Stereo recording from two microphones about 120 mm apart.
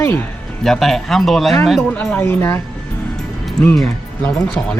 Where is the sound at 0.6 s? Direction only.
5° left (ahead or behind).